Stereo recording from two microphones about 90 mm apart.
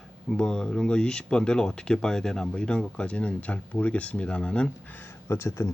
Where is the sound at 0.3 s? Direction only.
10° left (ahead or behind).